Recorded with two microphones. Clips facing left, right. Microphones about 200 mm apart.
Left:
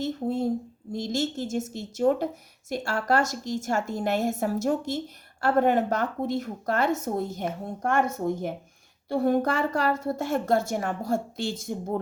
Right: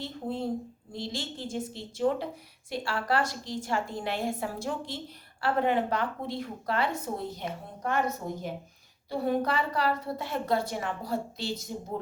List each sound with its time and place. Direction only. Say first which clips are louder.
0.0 s a woman's voice: left 6 dB; 45° left (ahead or behind)